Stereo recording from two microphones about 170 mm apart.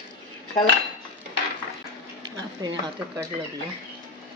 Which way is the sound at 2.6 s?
20° right (ahead or behind).